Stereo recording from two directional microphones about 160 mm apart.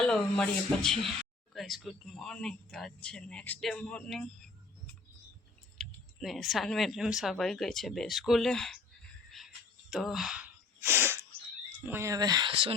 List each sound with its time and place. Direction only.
0.0 s speech: 5° left (ahead or behind)
5.7 s speech: centre (ahead or behind)
9.9 s gasp: centre (ahead or behind)
11.8 s speech: 15° right (ahead or behind); by 12.7 s 30° right (ahead or behind)